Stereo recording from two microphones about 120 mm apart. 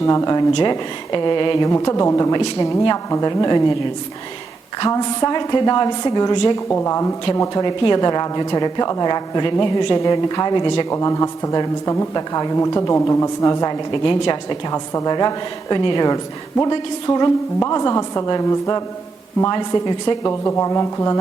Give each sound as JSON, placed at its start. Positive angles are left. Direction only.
{"t": 0.0, "sound": "a woman's voice", "side_deg": 30}
{"t": 0.5, "sound": "a woman's voice", "side_deg": 40}
{"t": 1.6, "sound": "speech", "side_deg": 25}
{"t": 4.8, "sound": "a woman's voice", "side_deg": 35}
{"t": 6.7, "sound": "speech", "side_deg": 20}
{"t": 7.6, "sound": "a woman's voice", "side_deg": 35}
{"t": 10.0, "sound": "speech", "side_deg": 25}
{"t": 10.5, "sound": "a woman's voice", "side_deg": 40}
{"t": 10.8, "sound": "speech", "side_deg": 25}
{"t": 14.7, "sound": "a woman's voice", "side_deg": 30}
{"t": 20.2, "sound": "speech", "side_deg": 20}